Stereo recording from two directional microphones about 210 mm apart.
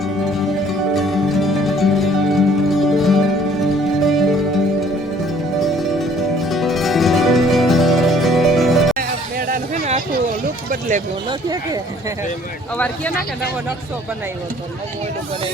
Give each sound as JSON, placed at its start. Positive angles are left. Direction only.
{"t": 0.0, "sound": "music", "side_deg": 0}
{"t": 9.0, "sound": "music", "side_deg": -45}
{"t": 10.7, "sound": "speech", "side_deg": -40}
{"t": 11.3, "sound": "speech", "side_deg": -20}
{"t": 12.7, "sound": "speech", "side_deg": 5}